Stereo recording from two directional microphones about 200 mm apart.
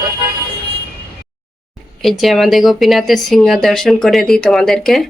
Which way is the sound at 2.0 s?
Centre (ahead or behind).